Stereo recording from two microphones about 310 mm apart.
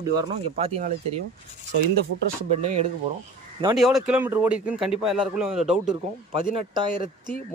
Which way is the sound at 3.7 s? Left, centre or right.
Centre.